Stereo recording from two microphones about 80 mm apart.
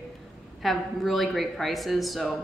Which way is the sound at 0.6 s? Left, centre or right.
Centre.